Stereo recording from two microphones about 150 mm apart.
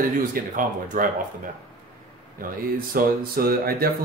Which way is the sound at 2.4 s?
70° right (ahead or behind).